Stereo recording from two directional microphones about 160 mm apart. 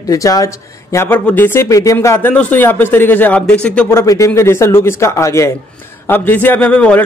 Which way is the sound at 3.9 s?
20° left (ahead or behind).